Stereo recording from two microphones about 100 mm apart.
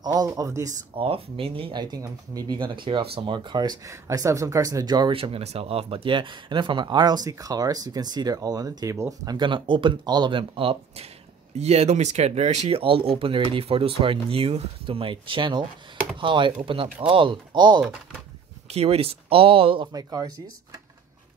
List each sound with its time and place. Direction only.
0.0 s speech: 40° right (ahead or behind)
0.9 s speech: 70° right (ahead or behind); by 3.7 s 45° right (ahead or behind)
3.8 s speech: 35° right (ahead or behind)
5.1 s speech: 70° right (ahead or behind); by 9.3 s 30° right (ahead or behind)
9.3 s speech: 55° right (ahead or behind)
11.5 s speech: 90° right; by 17.8 s 45° right (ahead or behind)
18.7 s speech: 85° right; by 19.9 s 65° right (ahead or behind)
19.9 s speech: 40° right (ahead or behind)